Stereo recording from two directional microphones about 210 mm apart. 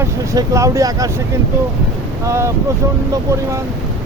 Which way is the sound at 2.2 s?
15° right (ahead or behind).